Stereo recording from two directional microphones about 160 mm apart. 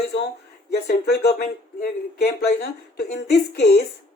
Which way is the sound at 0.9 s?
90° left.